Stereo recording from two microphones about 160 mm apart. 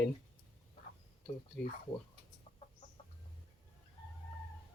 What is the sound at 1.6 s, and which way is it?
Speech, 5° left (ahead or behind).